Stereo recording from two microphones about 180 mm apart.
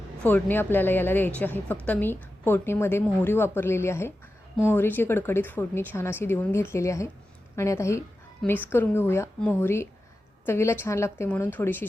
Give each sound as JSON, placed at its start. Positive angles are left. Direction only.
{"t": 0.2, "sound": "a woman's voice", "side_deg": 10}